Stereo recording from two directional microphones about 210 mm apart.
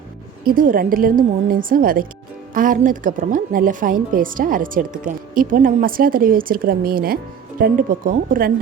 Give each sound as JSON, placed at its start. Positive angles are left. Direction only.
{"t": 0.4, "sound": "a woman's voice", "side_deg": -40}